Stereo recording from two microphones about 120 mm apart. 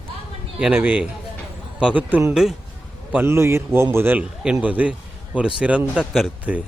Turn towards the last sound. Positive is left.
turn(degrees=-5)  # may be behind; listen again after turning